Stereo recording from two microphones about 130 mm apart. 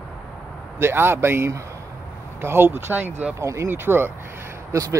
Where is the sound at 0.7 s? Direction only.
20° right (ahead or behind).